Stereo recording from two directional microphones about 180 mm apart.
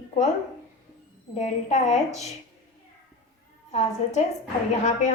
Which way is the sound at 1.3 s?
40° left (ahead or behind).